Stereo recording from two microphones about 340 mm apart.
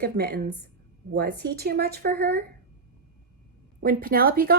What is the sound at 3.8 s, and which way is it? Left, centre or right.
Speech, right.